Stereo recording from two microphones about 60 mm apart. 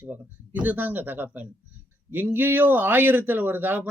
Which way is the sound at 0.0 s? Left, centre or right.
Right.